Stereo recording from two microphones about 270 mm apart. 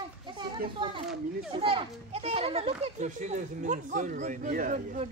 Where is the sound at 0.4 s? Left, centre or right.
Centre.